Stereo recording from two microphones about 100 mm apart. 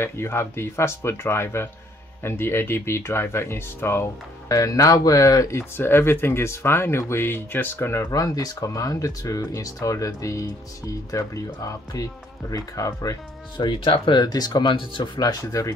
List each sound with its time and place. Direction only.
0.0 s speech: 25° left (ahead or behind)
8.0 s speech: 40° left (ahead or behind)
13.7 s speech: 60° left (ahead or behind)
14.2 s speech: 45° left (ahead or behind)